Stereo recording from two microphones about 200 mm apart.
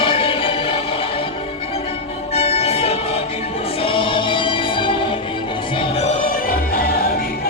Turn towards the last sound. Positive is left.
turn(degrees=30)  # may be behind; listen again after turning